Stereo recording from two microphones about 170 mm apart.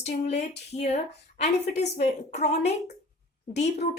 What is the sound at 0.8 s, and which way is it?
Speech, 40° left (ahead or behind).